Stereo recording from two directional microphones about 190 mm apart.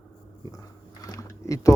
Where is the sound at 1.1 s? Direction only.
15° left (ahead or behind).